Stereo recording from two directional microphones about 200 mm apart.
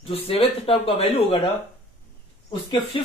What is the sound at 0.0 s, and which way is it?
Speech, 30° left (ahead or behind).